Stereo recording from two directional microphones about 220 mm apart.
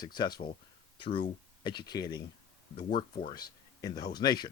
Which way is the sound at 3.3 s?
20° left (ahead or behind).